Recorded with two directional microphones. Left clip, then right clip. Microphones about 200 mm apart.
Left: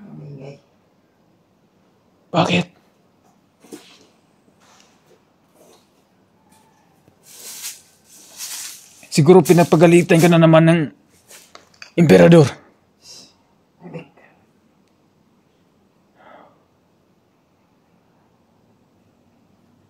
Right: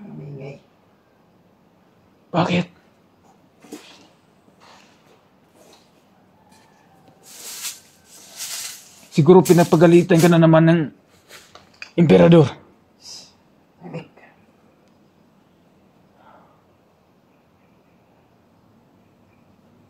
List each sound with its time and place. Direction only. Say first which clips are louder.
2.3 s speech: left 3 dB; 60° left (ahead or behind)
9.1 s speech: left 1 dB; 55° left (ahead or behind)
11.9 s speech: left 2 dB; 40° left (ahead or behind)